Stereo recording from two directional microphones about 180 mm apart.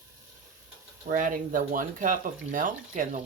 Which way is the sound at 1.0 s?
50° right (ahead or behind).